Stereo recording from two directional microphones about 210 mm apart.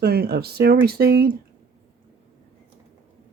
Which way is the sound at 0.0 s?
50° right (ahead or behind).